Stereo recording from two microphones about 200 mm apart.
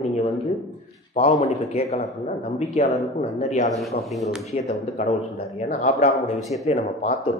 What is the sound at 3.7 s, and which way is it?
Speech, centre (ahead or behind).